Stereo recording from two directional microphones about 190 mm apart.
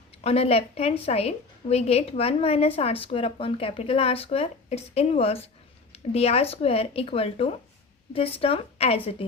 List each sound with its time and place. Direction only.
0.2 s a woman's voice: 30° left (ahead or behind)